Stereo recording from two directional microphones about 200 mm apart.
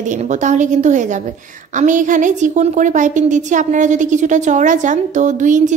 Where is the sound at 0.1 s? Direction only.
35° right (ahead or behind).